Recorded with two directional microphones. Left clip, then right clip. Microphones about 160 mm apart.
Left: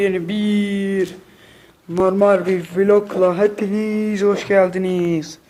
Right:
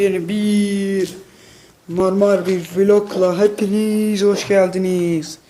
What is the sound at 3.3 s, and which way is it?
Speech, 20° right (ahead or behind).